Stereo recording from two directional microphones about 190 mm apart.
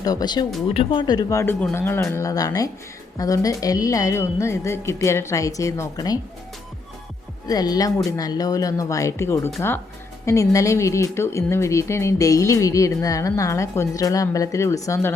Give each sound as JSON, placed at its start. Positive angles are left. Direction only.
{"t": 0.0, "sound": "speech", "side_deg": 20}
{"t": 7.4, "sound": "speech", "side_deg": 20}